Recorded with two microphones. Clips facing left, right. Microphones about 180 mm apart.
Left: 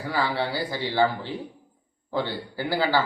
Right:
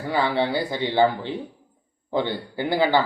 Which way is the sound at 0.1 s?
20° right (ahead or behind).